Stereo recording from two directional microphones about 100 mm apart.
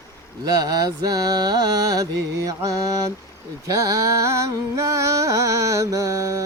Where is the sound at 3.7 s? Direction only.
35° right (ahead or behind).